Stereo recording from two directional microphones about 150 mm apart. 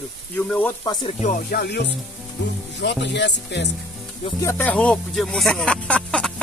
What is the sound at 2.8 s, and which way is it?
Speech, 90° left.